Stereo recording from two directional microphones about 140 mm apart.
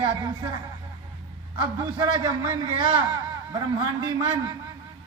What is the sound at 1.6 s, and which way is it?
A man's voice, 35° right (ahead or behind).